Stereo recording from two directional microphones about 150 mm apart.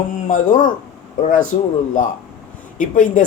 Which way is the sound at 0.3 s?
60° left (ahead or behind).